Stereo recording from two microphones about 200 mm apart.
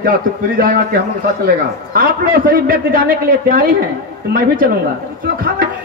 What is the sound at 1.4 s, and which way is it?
A man's voice, 45° right (ahead or behind).